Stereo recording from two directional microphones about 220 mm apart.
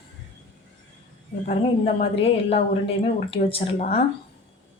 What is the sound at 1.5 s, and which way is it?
A woman's voice, 30° left (ahead or behind).